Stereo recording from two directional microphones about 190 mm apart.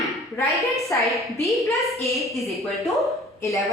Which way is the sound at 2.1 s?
Centre (ahead or behind).